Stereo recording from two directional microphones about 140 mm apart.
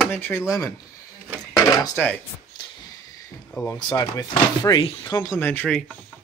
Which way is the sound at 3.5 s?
15° left (ahead or behind).